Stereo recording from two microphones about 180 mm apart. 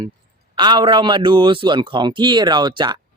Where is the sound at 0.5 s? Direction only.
25° right (ahead or behind).